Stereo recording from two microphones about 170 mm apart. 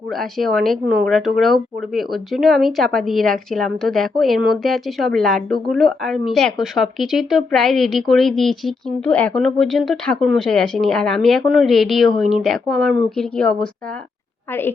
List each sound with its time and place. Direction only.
0.1 s speech: centre (ahead or behind)